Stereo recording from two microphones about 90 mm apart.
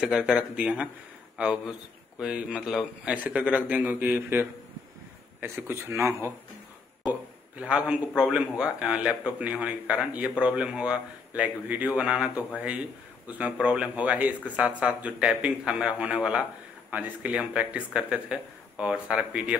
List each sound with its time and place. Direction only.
0.0 s speech: 5° right (ahead or behind); by 6.3 s 30° right (ahead or behind)
7.5 s speech: 10° right (ahead or behind)